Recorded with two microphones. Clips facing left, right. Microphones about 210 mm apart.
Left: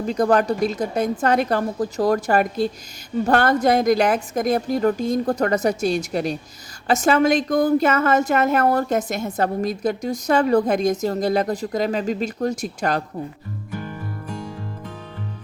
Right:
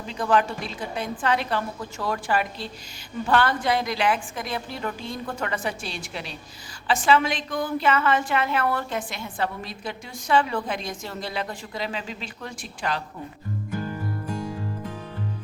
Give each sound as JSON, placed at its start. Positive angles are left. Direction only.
{"t": 0.0, "sound": "a woman's voice", "side_deg": 45}
{"t": 14.4, "sound": "music", "side_deg": -10}